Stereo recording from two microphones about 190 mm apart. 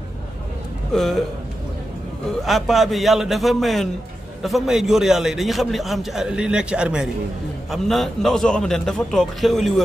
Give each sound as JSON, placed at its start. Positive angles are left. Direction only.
{"t": 0.9, "sound": "a man's voice", "side_deg": 0}
{"t": 2.4, "sound": "a man's voice", "side_deg": 0}